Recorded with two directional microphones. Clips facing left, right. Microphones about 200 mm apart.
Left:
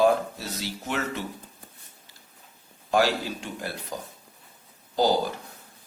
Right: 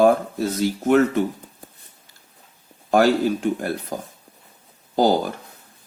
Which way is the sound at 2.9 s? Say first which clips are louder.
Right 7 dB; 50° right (ahead or behind).